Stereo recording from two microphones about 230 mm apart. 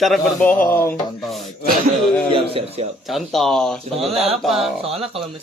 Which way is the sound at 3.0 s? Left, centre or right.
Centre.